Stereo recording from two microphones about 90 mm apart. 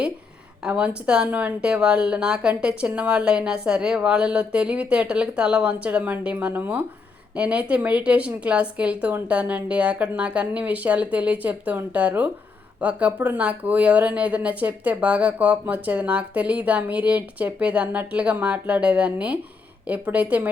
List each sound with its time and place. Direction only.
0.6 s speech: 10° right (ahead or behind)